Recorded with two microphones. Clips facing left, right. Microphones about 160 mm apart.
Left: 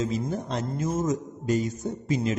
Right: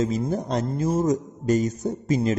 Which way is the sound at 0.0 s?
40° right (ahead or behind).